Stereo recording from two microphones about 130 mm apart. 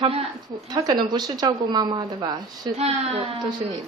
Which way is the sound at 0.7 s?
30° right (ahead or behind).